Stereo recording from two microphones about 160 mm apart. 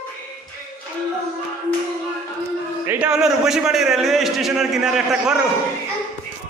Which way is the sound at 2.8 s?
10° right (ahead or behind).